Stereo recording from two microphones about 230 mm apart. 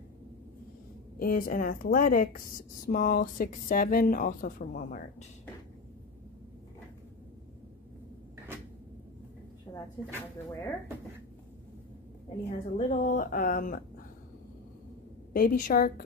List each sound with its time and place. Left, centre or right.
1.2 s a woman's voice: left
9.7 s a sound: centre
12.4 s a woman's voice: left
15.3 s a woman's voice: left